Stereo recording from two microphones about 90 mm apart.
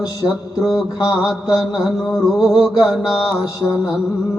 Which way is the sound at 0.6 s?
5° right (ahead or behind).